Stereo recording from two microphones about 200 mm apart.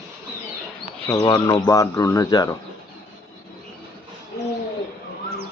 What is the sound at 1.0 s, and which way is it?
Speech, 20° left (ahead or behind).